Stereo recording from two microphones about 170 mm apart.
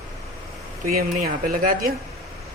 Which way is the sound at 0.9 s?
60° right (ahead or behind).